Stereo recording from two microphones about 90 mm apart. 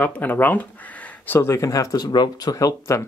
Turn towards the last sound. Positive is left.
turn(degrees=40)  # may be behind; listen again after turning